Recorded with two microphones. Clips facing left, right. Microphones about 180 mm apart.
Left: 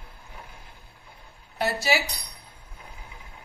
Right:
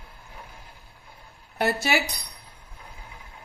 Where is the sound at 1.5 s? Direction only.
55° right (ahead or behind).